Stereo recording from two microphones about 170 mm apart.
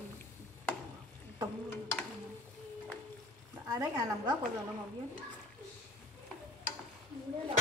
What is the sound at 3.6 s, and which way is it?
Speech, 20° right (ahead or behind).